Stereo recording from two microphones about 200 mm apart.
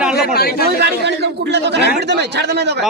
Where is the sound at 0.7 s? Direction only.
55° right (ahead or behind).